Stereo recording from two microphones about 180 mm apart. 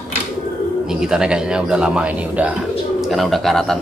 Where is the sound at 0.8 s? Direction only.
5° right (ahead or behind).